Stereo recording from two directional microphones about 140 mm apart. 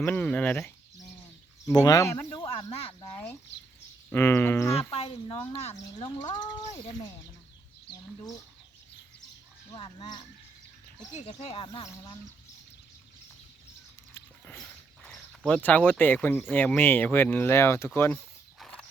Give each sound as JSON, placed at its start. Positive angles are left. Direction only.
{"t": 0.0, "sound": "speech", "side_deg": 10}
{"t": 1.6, "sound": "speech", "side_deg": 25}
{"t": 2.3, "sound": "speech", "side_deg": 40}
{"t": 4.1, "sound": "speech", "side_deg": 15}
{"t": 4.9, "sound": "speech", "side_deg": 40}
{"t": 9.7, "sound": "speech", "side_deg": 35}
{"t": 11.1, "sound": "speech", "side_deg": 50}
{"t": 11.8, "sound": "speech", "side_deg": 25}
{"t": 14.1, "sound": "a sound", "side_deg": 10}
{"t": 16.5, "sound": "speech", "side_deg": 15}
{"t": 18.6, "sound": "horse", "side_deg": 5}